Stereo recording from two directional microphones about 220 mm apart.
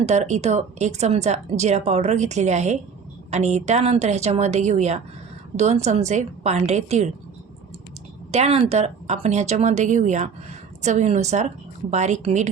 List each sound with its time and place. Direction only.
0.0 s speech: 30° right (ahead or behind)
8.3 s speech: 30° right (ahead or behind)